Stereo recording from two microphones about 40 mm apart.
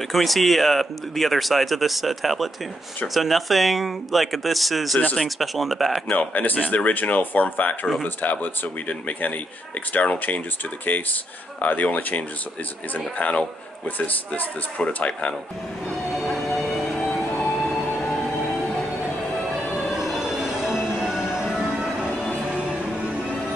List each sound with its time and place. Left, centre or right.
0.1 s speech: centre
6.1 s speech: left
11.6 s speech: left
13.8 s speech: left
16.2 s music: centre
19.9 s music: centre